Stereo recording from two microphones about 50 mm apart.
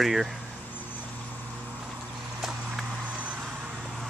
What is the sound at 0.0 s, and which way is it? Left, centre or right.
Speech, centre.